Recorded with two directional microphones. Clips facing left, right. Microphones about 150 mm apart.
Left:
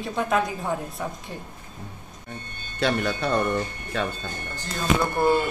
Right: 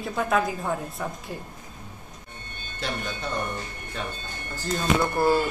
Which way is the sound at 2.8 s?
70° left (ahead or behind).